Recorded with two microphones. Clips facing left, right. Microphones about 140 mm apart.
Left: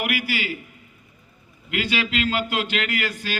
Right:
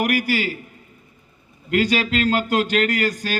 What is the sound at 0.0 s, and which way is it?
Speech, 45° right (ahead or behind).